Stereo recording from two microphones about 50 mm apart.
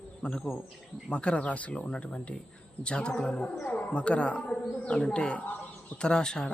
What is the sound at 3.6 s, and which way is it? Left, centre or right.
Speech, left.